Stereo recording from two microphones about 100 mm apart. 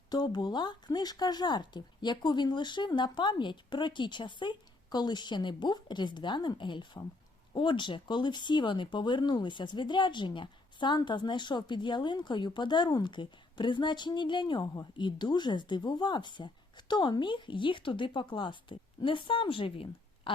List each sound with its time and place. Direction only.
0.1 s speech: 45° left (ahead or behind); by 20.3 s 60° left (ahead or behind)